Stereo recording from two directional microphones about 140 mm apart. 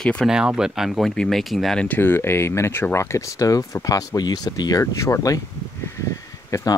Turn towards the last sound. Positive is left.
turn(degrees=20)  # may be behind; listen again after turning